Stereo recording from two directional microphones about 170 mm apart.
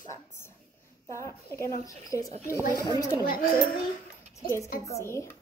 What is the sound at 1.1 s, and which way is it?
A woman's voice, 15° left (ahead or behind).